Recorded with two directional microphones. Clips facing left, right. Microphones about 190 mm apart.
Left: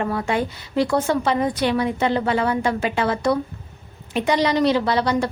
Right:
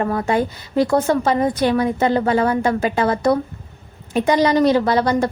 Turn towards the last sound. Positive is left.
turn(degrees=-45)  # may be behind; listen again after turning